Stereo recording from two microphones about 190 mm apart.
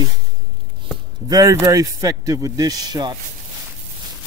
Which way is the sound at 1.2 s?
20° right (ahead or behind).